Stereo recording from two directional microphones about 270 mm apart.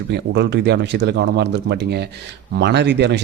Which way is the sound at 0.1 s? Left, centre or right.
Right.